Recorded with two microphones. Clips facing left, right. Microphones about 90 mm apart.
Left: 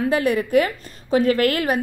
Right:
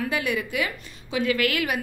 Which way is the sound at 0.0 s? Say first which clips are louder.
Left 7 dB; 40° left (ahead or behind).